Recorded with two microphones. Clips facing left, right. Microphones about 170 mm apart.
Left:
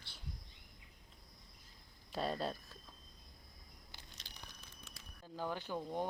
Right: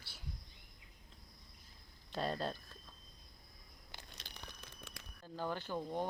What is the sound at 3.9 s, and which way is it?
Crumpling, 55° right (ahead or behind).